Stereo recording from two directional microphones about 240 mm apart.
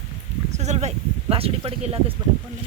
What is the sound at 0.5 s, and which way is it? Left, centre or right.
Speech, right.